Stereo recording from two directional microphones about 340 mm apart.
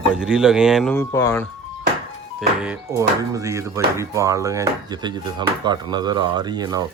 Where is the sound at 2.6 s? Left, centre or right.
Centre.